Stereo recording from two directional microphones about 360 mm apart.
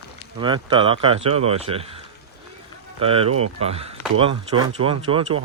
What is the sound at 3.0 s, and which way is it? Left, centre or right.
Speech, centre.